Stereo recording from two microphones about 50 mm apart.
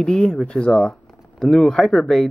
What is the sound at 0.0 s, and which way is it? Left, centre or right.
Speech, centre.